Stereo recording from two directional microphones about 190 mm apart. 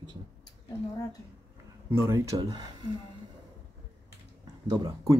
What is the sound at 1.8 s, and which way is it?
Speech, 15° right (ahead or behind).